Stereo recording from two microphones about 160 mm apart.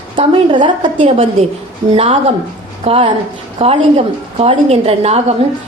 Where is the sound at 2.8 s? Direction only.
35° right (ahead or behind).